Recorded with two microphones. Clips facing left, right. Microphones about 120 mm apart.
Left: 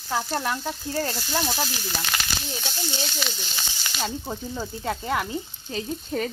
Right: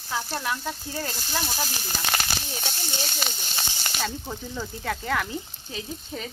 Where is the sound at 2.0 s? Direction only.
45° right (ahead or behind).